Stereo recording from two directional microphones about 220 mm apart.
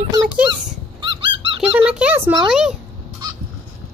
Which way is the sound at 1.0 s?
25° right (ahead or behind).